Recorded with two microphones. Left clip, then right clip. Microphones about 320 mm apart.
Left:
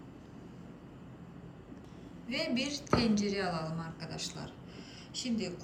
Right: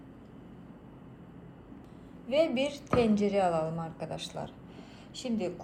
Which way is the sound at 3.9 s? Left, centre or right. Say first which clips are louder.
Right 4 dB; right.